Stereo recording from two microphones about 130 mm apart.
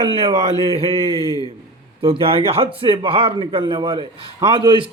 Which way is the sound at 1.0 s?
30° left (ahead or behind).